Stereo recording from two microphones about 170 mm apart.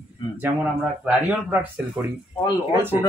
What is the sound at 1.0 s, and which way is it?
Speech, 10° right (ahead or behind).